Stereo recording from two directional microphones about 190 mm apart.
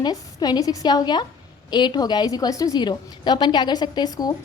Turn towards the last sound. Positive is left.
turn(degrees=20)  # may be behind; listen again after turning